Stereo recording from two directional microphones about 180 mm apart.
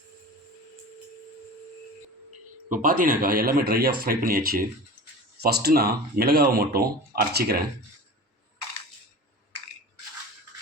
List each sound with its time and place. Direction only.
2.6 s speech: 45° right (ahead or behind)